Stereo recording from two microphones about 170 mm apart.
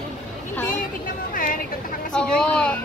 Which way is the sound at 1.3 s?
50° left (ahead or behind).